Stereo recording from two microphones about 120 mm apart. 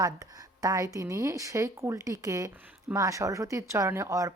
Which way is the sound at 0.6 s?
30° right (ahead or behind).